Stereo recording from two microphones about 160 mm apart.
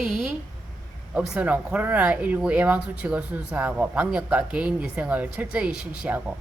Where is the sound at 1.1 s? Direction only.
10° right (ahead or behind).